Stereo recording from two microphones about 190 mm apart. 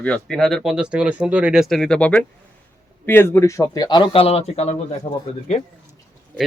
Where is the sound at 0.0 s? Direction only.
5° left (ahead or behind); by 4.9 s 35° left (ahead or behind).